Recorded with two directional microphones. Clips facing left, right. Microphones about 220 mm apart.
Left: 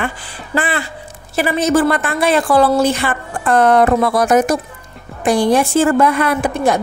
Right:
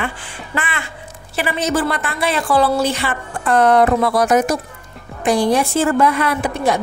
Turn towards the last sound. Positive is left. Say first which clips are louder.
# left 3 dB
turn(degrees=50)  # may be behind; listen again after turning